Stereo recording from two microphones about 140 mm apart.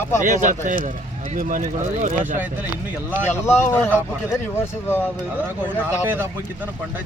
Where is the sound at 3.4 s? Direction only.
20° left (ahead or behind).